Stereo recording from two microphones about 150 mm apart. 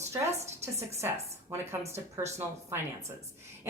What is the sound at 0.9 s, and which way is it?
Speech, 20° right (ahead or behind).